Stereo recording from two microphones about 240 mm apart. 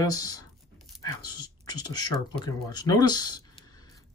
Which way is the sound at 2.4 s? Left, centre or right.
Centre.